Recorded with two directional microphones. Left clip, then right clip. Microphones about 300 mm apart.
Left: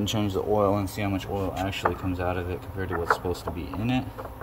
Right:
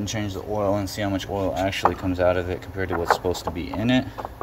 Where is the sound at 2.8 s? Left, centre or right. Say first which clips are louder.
Right 4 dB; right.